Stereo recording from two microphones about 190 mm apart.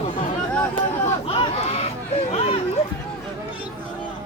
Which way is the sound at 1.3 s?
30° left (ahead or behind).